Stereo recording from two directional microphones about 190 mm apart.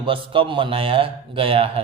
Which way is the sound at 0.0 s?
25° right (ahead or behind).